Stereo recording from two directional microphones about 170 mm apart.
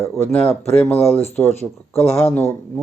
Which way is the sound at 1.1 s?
40° left (ahead or behind).